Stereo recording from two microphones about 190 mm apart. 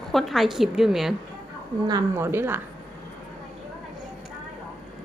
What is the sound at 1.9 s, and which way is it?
Speech, 15° right (ahead or behind).